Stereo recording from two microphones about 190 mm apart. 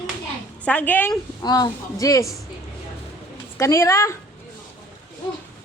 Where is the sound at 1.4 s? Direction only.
20° left (ahead or behind).